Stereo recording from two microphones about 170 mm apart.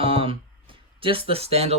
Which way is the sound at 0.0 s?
35° right (ahead or behind).